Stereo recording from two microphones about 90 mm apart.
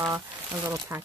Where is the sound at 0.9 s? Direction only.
30° right (ahead or behind).